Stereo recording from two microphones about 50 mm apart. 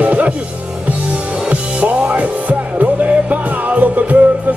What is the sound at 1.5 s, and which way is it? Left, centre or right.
Music, right.